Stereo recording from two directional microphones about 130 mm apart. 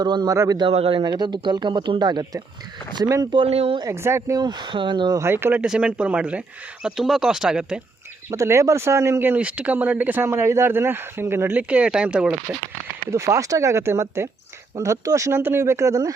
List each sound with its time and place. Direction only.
0.0 s speech: 35° right (ahead or behind)
0.7 s speech: 50° right (ahead or behind); by 3.4 s 30° right (ahead or behind)
3.4 s speech: 50° right (ahead or behind)
3.8 s speech: 20° right (ahead or behind)
5.2 s speech: 20° right (ahead or behind)
5.6 s speech: 5° right (ahead or behind)
8.3 s speech: 20° right (ahead or behind)
13.1 s speech: 20° right (ahead or behind)